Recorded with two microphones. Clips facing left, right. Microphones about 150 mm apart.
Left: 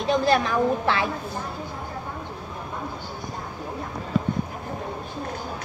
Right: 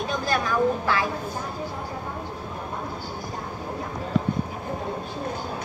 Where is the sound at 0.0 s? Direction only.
25° left (ahead or behind).